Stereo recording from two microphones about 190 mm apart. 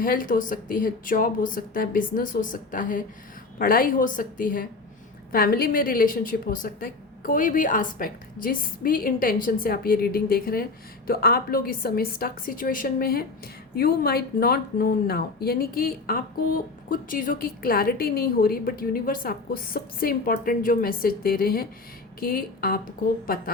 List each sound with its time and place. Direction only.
0.0 s a woman's voice: 45° left (ahead or behind)